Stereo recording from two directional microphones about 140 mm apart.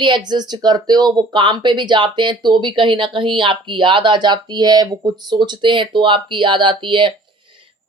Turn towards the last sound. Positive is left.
turn(degrees=-35)  # may be behind; listen again after turning